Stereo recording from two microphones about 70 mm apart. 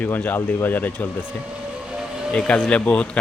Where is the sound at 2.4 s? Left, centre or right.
Centre.